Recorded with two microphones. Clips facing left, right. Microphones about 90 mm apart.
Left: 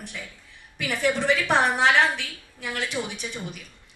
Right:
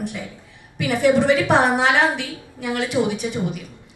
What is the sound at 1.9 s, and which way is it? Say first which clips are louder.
A woman's voice: right 3 dB; 20° right (ahead or behind).